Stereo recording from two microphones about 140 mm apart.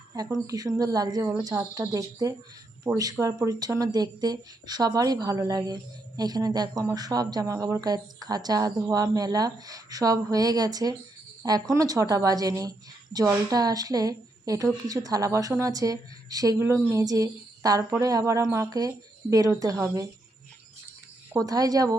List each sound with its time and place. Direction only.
0.1 s a woman's voice: 25° right (ahead or behind)
21.4 s speech: 25° right (ahead or behind)